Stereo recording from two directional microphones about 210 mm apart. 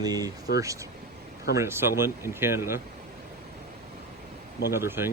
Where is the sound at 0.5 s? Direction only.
50° left (ahead or behind).